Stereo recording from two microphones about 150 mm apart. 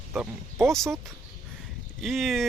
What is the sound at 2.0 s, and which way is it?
Speech, centre (ahead or behind).